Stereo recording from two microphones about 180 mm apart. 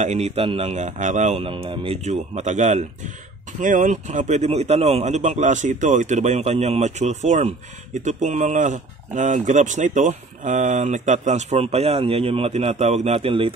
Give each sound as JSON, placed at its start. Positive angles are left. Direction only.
{"t": 0.0, "sound": "a man's voice", "side_deg": -40}